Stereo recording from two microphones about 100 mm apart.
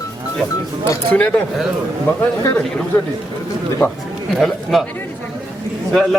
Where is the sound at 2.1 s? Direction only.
20° left (ahead or behind).